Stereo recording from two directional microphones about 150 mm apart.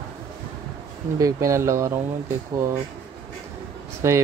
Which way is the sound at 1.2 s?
20° right (ahead or behind).